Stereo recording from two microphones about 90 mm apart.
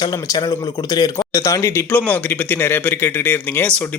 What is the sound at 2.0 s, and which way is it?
Speech, 20° left (ahead or behind).